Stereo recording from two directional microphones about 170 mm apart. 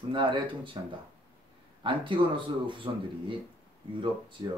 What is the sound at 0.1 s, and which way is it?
Speech, 30° right (ahead or behind).